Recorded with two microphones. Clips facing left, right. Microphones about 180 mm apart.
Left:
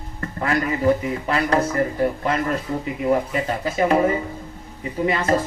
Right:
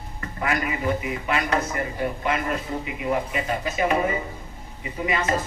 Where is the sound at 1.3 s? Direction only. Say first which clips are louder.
Left 4 dB; 35° left (ahead or behind).